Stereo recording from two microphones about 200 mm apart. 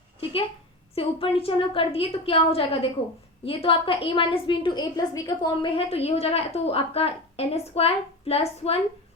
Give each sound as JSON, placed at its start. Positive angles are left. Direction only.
{"t": 0.9, "sound": "a woman's voice", "side_deg": 30}